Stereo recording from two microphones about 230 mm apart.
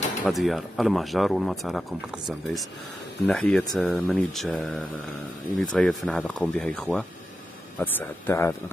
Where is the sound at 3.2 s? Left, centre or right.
Centre.